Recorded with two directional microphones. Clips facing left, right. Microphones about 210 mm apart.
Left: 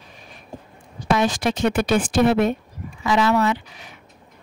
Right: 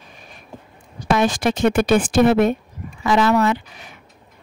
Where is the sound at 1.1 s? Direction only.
50° right (ahead or behind).